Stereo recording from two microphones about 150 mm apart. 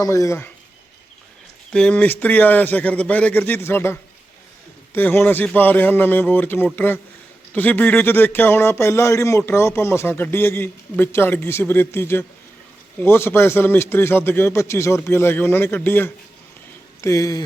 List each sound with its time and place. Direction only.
0.0 s speech: 20° left (ahead or behind)
1.7 s a man's voice: 10° left (ahead or behind)
4.9 s a man's voice: 15° left (ahead or behind)